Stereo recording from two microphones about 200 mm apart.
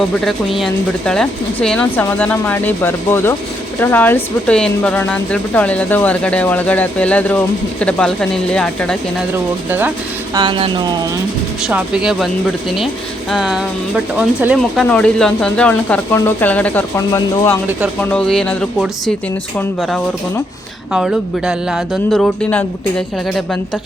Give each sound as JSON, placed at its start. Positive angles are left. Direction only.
{"t": 0.3, "sound": "speech", "side_deg": 0}
{"t": 9.6, "sound": "speech", "side_deg": -10}
{"t": 10.3, "sound": "speech", "side_deg": -25}
{"t": 11.6, "sound": "speech", "side_deg": -5}
{"t": 13.3, "sound": "speech", "side_deg": -5}
{"t": 18.1, "sound": "speech", "side_deg": 5}
{"t": 20.9, "sound": "speech", "side_deg": -5}